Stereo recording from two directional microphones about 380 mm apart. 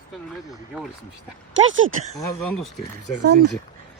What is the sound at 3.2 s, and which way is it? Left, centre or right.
Speech, right.